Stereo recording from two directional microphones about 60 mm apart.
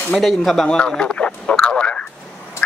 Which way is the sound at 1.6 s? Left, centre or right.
Centre.